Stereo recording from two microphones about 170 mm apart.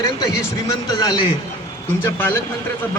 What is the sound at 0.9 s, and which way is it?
A man's voice, 25° left (ahead or behind).